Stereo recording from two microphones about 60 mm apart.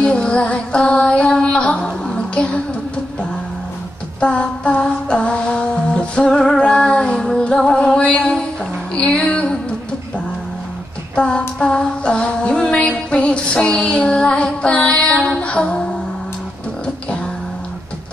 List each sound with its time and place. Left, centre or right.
0.0 s music: centre
4.2 s music: centre
11.1 s female singing: centre